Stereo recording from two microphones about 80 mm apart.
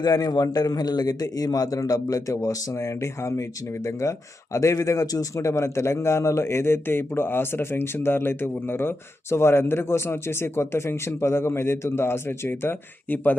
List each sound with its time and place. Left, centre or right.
0.0 s a man's voice: left